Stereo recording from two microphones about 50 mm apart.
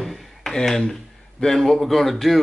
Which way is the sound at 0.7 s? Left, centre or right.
Centre.